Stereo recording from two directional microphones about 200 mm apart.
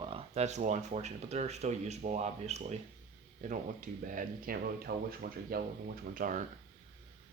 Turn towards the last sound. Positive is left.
turn(degrees=-40)  # may be behind; listen again after turning